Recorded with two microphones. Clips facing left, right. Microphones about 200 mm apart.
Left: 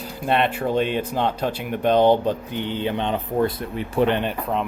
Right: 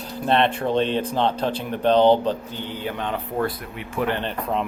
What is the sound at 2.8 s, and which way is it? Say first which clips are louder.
Speech: left 2 dB; 25° left (ahead or behind).